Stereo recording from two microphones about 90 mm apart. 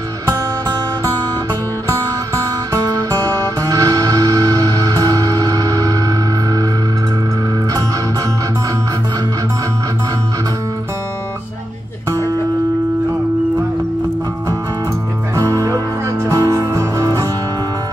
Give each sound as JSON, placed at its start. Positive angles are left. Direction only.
{"t": 0.3, "sound": "music", "side_deg": -40}
{"t": 15.3, "sound": "music", "side_deg": -35}